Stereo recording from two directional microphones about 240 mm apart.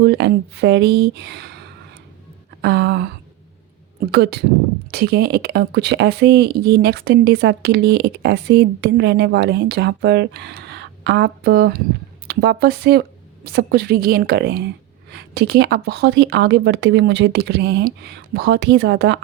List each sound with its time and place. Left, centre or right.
0.0 s speech: right
4.1 s a woman's voice: right